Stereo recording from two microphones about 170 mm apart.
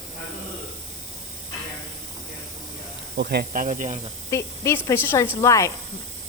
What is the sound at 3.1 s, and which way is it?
Speech, 65° right (ahead or behind).